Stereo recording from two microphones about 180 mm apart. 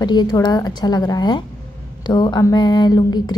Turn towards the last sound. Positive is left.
turn(degrees=25)  # may be behind; listen again after turning